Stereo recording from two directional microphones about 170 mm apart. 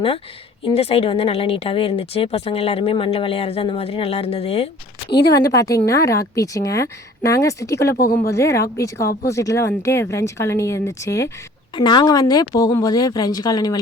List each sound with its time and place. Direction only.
0.6 s speech: 35° left (ahead or behind)
5.5 s a woman's voice: 20° left (ahead or behind)
7.9 s speech: 60° left (ahead or behind)
8.3 s a woman's voice: 15° left (ahead or behind)